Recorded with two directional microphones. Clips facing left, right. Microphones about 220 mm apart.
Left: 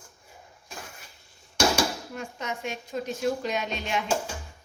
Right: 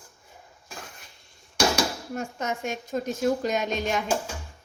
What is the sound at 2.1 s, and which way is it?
Speech, 45° right (ahead or behind).